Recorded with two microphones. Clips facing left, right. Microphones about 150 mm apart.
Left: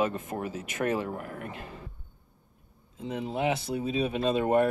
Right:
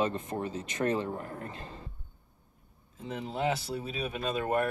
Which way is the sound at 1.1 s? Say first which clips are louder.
Left 2 dB; 30° right (ahead or behind).